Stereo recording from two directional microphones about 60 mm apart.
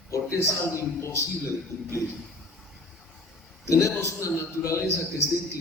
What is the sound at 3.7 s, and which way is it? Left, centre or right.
Speech, left.